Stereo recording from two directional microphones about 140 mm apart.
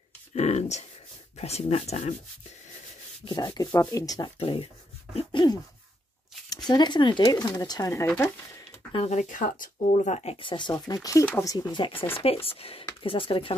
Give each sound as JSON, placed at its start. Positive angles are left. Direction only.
{"t": 0.3, "sound": "speech", "side_deg": 50}
{"t": 3.3, "sound": "speech", "side_deg": 30}
{"t": 4.4, "sound": "speech", "side_deg": 40}
{"t": 7.9, "sound": "speech", "side_deg": 15}
{"t": 8.9, "sound": "speech", "side_deg": 50}
{"t": 10.4, "sound": "speech", "side_deg": 35}